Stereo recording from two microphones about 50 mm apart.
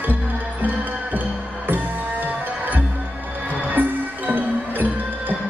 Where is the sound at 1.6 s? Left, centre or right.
Right.